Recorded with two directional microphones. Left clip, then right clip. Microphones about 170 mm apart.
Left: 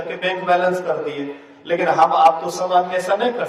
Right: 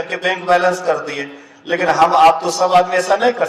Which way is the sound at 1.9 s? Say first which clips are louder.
Right 2 dB; 30° right (ahead or behind).